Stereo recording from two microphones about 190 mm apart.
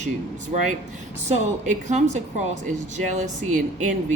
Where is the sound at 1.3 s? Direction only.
35° right (ahead or behind).